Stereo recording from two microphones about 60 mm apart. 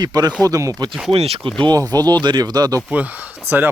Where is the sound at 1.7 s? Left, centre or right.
Right.